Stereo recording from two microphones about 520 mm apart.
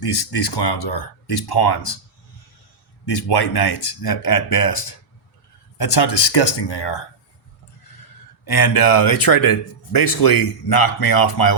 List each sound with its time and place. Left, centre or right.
0.0 s speech: left
3.1 s speech: left
8.4 s a man's voice: left